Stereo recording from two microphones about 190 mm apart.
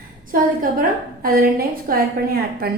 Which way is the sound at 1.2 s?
50° right (ahead or behind).